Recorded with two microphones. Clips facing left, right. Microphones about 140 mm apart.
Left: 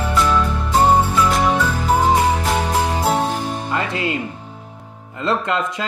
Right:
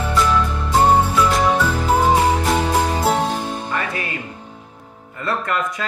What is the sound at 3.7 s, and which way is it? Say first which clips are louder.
Music: left 3 dB; 20° left (ahead or behind).